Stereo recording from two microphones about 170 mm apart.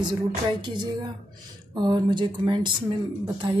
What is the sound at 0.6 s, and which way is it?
A woman's voice, 25° right (ahead or behind).